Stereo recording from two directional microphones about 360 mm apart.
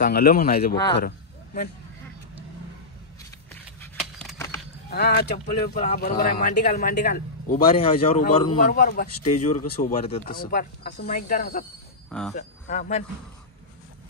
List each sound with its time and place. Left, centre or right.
0.0 s a man's voice: left
0.9 s a sound: left
3.8 s a sound: centre
4.8 s a man's voice: left
12.1 s speech: centre
12.4 s a man's voice: centre